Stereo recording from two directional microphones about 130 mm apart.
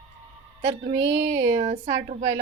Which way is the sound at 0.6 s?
55° right (ahead or behind).